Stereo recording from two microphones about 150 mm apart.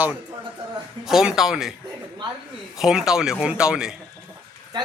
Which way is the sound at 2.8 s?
5° right (ahead or behind).